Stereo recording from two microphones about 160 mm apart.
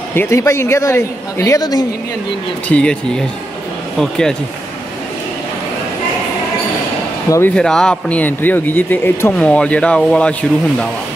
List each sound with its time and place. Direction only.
0.1 s a man's voice: 15° left (ahead or behind)
2.7 s speech: 5° left (ahead or behind)
4.0 s speech: 5° left (ahead or behind)
7.2 s speech: 15° left (ahead or behind)
7.5 s speech: 5° left (ahead or behind)